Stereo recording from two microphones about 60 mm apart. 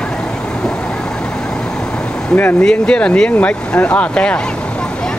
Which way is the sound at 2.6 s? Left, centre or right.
Centre.